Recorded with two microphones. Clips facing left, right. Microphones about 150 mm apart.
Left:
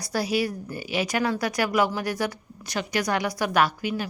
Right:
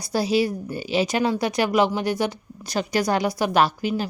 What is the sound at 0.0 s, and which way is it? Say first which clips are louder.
A woman's voice: right 4 dB; 25° right (ahead or behind).